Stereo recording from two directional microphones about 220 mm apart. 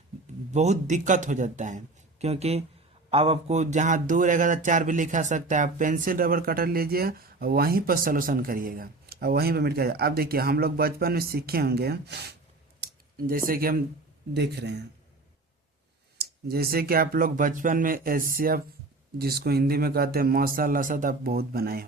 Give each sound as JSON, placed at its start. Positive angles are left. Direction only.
{"t": 0.5, "sound": "speech", "side_deg": -30}
{"t": 12.8, "sound": "a sound", "side_deg": -40}
{"t": 14.3, "sound": "speech", "side_deg": -50}
{"t": 16.1, "sound": "speech", "side_deg": -45}